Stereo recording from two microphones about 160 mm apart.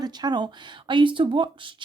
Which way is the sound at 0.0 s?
25° right (ahead or behind).